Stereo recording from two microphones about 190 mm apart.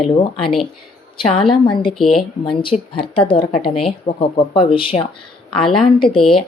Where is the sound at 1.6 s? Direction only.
25° left (ahead or behind).